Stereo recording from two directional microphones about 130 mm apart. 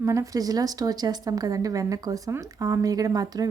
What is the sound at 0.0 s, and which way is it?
Speech, 25° right (ahead or behind).